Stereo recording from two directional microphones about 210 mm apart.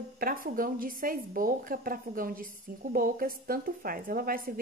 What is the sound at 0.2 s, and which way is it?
Speech, 45° right (ahead or behind).